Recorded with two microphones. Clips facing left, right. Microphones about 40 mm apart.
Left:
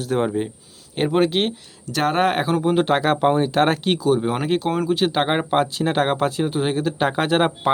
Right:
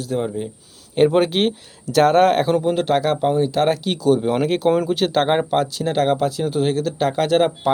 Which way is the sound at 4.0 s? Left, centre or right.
Centre.